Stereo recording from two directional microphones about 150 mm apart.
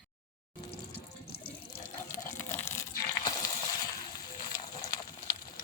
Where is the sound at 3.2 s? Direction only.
25° left (ahead or behind).